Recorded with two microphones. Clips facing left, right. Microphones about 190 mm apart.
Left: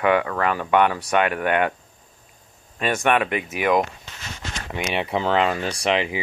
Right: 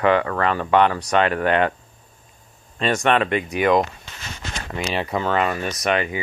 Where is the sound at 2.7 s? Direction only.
10° left (ahead or behind).